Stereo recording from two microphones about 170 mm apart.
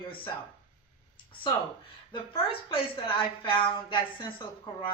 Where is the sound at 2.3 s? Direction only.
30° left (ahead or behind).